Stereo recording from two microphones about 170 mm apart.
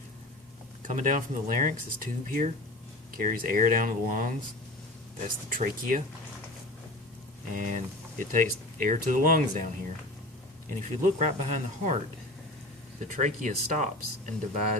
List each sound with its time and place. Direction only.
0.8 s speech: 50° right (ahead or behind)
5.5 s speech: 55° right (ahead or behind)
7.5 s speech: 50° right (ahead or behind)
13.0 s speech: 45° right (ahead or behind)